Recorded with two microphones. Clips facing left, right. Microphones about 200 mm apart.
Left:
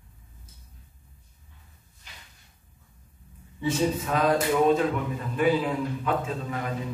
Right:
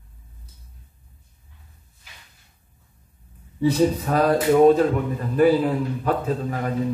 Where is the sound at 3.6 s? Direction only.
40° right (ahead or behind).